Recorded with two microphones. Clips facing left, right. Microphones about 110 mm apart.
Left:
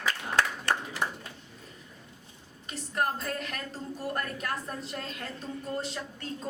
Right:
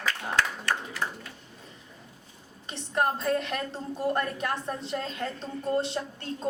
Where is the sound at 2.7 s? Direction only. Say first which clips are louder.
Right 3 dB; 30° right (ahead or behind).